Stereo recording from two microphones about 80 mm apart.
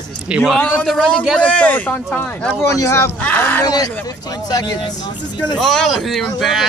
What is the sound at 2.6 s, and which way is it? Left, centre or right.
Speech, left.